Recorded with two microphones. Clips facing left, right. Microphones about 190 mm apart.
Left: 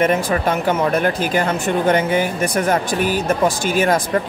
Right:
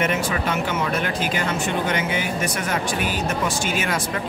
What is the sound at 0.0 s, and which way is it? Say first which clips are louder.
Speech: left 6 dB; 35° left (ahead or behind).